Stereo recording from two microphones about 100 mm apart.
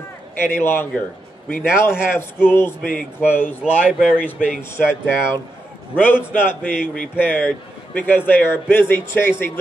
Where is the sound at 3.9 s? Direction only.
10° right (ahead or behind).